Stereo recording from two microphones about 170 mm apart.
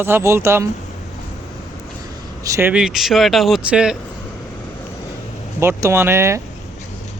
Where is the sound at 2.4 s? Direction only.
20° right (ahead or behind).